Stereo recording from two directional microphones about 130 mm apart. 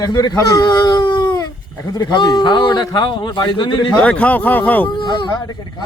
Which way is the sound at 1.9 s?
30° left (ahead or behind).